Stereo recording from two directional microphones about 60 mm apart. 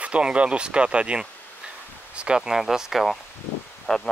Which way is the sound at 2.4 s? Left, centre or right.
Centre.